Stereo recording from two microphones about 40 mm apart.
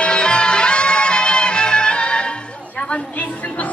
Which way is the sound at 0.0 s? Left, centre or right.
Left.